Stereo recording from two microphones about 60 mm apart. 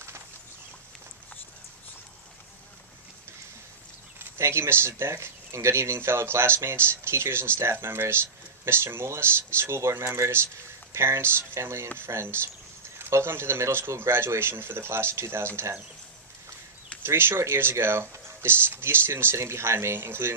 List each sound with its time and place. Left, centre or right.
4.2 s speech: right
17.0 s speech: right